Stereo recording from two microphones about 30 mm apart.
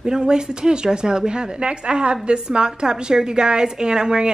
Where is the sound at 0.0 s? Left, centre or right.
Right.